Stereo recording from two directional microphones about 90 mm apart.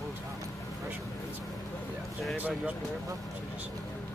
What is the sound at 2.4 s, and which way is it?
Speech, 15° right (ahead or behind).